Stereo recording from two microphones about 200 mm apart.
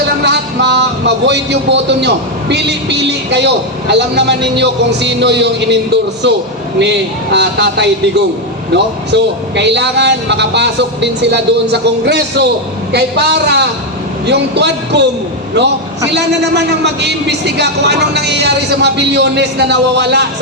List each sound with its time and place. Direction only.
0.3 s a man's voice: 60° right (ahead or behind)
16.1 s a man's voice: 60° right (ahead or behind)